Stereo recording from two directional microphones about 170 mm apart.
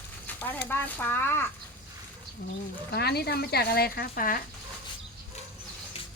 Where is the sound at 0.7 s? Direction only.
10° left (ahead or behind).